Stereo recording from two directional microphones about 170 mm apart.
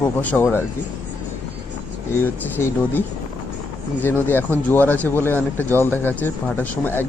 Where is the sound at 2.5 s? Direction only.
10° left (ahead or behind).